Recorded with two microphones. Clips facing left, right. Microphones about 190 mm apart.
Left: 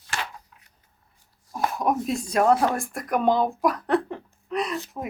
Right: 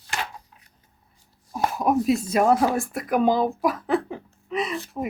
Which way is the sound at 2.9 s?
Centre (ahead or behind).